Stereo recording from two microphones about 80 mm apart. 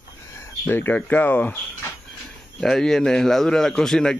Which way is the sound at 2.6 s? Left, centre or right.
Centre.